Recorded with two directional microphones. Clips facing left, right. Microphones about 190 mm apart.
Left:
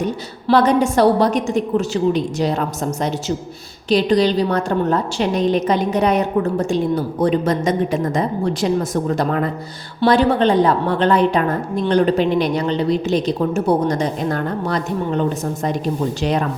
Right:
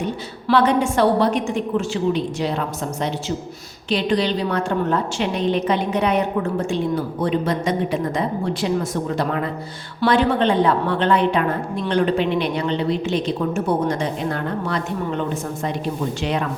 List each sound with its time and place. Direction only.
0.4 s a woman's voice: 40° left (ahead or behind)